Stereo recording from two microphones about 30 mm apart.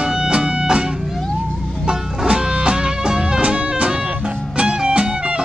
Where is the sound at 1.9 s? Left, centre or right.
Right.